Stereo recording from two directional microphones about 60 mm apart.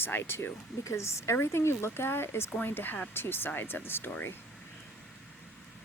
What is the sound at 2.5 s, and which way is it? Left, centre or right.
Speech, left.